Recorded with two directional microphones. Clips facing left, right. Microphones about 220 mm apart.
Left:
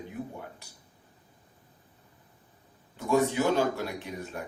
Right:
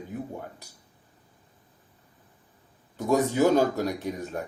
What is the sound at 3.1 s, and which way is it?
Speech, 40° right (ahead or behind).